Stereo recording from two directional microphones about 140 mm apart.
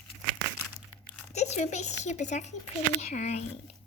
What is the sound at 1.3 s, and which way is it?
Speech, 55° left (ahead or behind).